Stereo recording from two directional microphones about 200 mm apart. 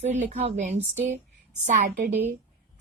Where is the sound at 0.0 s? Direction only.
35° right (ahead or behind).